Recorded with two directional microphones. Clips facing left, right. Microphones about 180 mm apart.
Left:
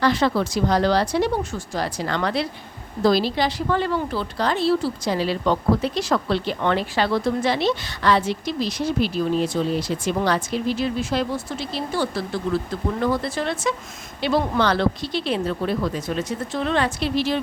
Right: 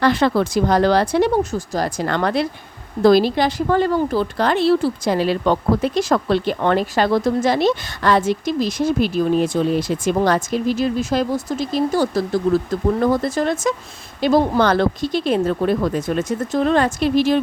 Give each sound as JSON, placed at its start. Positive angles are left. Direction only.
{"t": 0.0, "sound": "speech", "side_deg": -55}
{"t": 1.5, "sound": "speech", "side_deg": -40}